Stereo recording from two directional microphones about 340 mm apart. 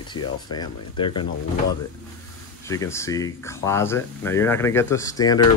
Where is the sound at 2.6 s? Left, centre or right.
Centre.